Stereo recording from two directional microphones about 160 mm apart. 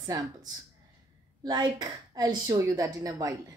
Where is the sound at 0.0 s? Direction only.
25° right (ahead or behind).